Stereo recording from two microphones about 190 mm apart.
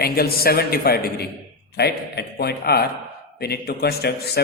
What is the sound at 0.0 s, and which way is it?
A man's voice, 55° left (ahead or behind).